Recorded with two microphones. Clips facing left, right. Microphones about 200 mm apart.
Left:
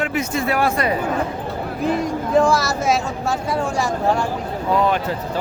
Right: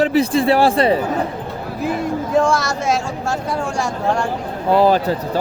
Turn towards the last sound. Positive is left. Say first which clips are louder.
# right 5 dB
turn(degrees=-35)  # may be behind; listen again after turning